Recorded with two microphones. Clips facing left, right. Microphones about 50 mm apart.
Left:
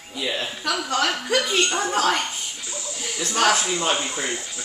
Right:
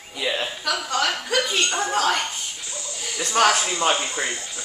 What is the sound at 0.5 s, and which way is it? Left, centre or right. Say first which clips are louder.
A woman's voice: even; centre.